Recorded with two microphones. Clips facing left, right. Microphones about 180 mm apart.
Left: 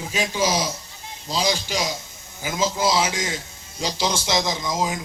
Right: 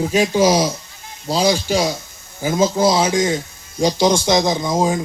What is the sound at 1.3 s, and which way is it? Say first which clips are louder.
Speech: right 7 dB; 45° right (ahead or behind).